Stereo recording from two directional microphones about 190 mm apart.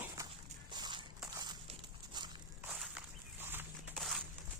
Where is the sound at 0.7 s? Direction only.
25° right (ahead or behind).